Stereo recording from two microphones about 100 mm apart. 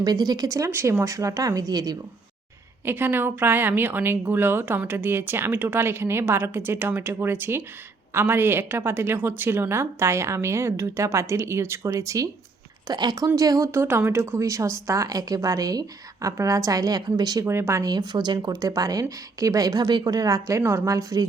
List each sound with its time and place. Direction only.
0.0 s speech: 40° right (ahead or behind)
0.7 s speech: 25° right (ahead or behind); by 2.0 s 40° right (ahead or behind)
2.8 s a woman's voice: 20° right (ahead or behind)
12.9 s speech: 45° right (ahead or behind)
17.4 s a woman's voice: 25° right (ahead or behind)
17.9 s speech: 45° right (ahead or behind)